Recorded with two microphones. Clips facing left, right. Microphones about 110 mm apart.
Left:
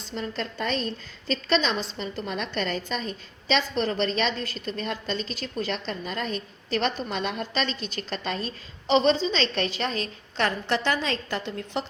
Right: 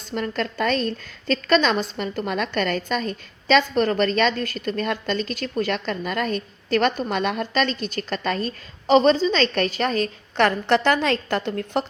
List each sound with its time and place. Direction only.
0.1 s a woman's voice: 60° right (ahead or behind)
1.3 s a woman's voice: 55° right (ahead or behind)
10.4 s a woman's voice: 60° right (ahead or behind)